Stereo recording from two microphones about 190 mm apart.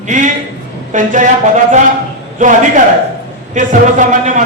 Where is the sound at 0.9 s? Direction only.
40° right (ahead or behind).